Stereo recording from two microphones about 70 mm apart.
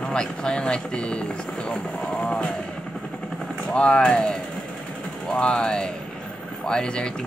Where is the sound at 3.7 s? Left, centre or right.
Centre.